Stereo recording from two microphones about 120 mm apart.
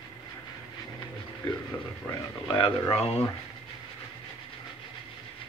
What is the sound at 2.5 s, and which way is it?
Speech, 40° left (ahead or behind).